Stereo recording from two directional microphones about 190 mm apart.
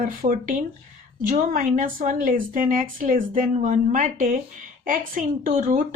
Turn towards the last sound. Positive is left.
turn(degrees=-45)  # may be behind; listen again after turning